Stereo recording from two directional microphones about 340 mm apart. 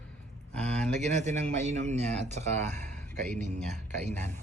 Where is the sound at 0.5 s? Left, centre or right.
Centre.